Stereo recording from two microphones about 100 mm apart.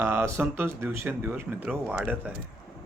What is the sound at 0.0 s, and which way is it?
A man's voice, 25° right (ahead or behind).